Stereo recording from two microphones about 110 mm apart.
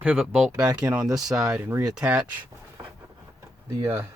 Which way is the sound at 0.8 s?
10° right (ahead or behind).